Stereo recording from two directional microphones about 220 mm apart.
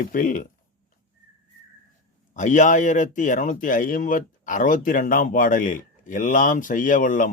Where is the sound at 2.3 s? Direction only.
35° left (ahead or behind).